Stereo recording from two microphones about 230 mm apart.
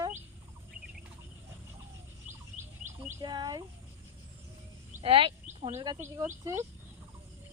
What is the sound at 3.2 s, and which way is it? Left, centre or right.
Speech, centre.